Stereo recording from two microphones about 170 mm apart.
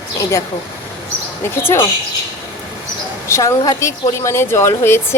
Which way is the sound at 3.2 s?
15° left (ahead or behind).